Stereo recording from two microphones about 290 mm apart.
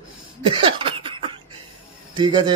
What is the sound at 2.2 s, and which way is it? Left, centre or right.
Speech, centre.